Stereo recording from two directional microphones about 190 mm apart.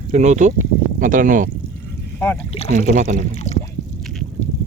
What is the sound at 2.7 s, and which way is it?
Speech, 40° right (ahead or behind).